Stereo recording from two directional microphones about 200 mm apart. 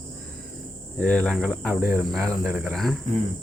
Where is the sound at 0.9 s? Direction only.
5° left (ahead or behind).